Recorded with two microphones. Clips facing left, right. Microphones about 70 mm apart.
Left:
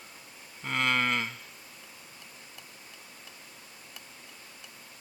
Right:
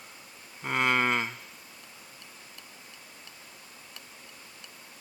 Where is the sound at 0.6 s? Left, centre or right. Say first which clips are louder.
Right 2 dB; centre.